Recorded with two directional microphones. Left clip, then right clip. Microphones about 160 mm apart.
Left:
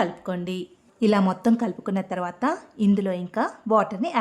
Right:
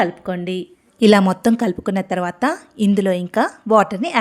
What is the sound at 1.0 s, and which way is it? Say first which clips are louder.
A woman's voice: right 8 dB; 30° right (ahead or behind).